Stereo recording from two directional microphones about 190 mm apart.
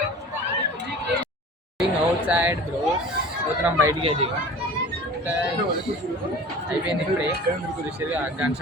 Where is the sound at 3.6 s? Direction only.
15° right (ahead or behind).